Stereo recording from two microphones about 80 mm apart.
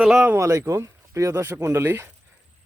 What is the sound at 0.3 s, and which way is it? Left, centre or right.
Speech, right.